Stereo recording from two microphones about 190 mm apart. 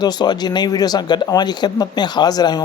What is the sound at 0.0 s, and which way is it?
Speech, 20° left (ahead or behind).